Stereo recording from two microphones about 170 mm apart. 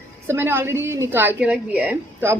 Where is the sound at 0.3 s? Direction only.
15° right (ahead or behind).